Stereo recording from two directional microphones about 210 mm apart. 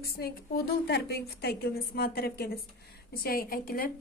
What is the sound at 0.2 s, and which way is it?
A woman's voice, 50° left (ahead or behind).